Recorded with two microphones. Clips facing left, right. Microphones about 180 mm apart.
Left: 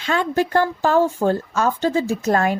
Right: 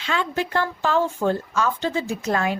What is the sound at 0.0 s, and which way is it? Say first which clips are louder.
Speech: left 5 dB; 45° left (ahead or behind).